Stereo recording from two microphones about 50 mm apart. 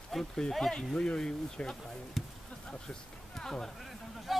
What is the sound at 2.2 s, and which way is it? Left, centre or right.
Basketball bounce, centre.